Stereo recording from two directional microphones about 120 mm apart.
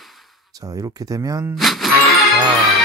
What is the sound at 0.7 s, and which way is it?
Speech, 30° right (ahead or behind).